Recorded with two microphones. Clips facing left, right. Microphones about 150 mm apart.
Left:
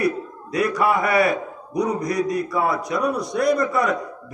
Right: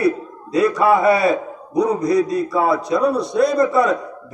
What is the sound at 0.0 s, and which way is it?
A man's voice, 25° right (ahead or behind).